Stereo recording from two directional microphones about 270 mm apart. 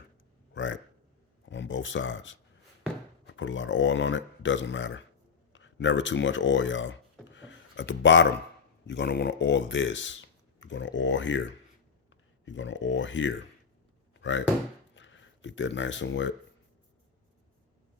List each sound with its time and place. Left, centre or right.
0.5 s speech: left
7.3 s a sound: left
8.9 s speech: left
12.5 s speech: left